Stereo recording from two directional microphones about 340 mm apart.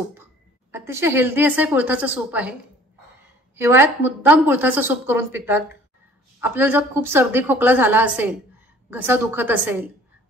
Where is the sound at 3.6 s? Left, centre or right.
Centre.